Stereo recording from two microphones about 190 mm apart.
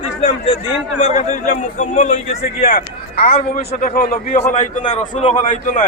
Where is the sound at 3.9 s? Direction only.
50° left (ahead or behind).